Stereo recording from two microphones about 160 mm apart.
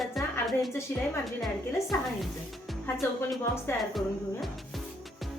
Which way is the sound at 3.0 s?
15° left (ahead or behind).